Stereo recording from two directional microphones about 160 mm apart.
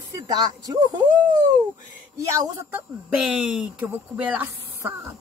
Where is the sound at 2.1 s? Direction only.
20° right (ahead or behind).